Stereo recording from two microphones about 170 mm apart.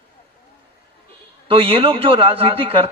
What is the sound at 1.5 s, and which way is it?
A man's voice, 35° right (ahead or behind).